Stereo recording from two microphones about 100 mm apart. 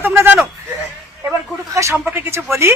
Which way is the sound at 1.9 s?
25° right (ahead or behind).